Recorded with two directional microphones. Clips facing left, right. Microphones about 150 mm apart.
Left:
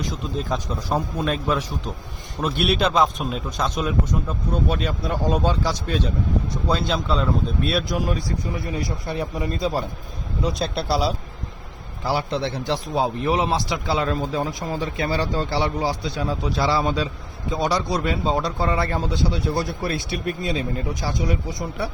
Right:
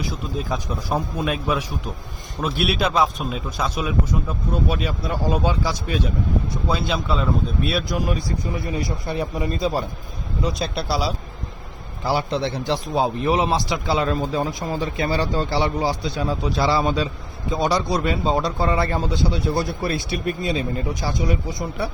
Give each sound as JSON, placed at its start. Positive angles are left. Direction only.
{"t": 0.0, "sound": "speech", "side_deg": -10}
{"t": 8.7, "sound": "speech", "side_deg": -15}
{"t": 12.0, "sound": "a man's voice", "side_deg": -25}